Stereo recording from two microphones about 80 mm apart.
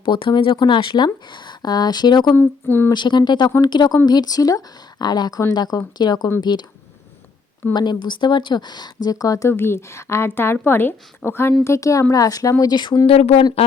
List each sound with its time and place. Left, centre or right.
0.0 s speech: left
2.3 s a woman's voice: left
2.9 s speech: left
7.7 s speech: left
9.5 s a woman's voice: left
12.7 s speech: left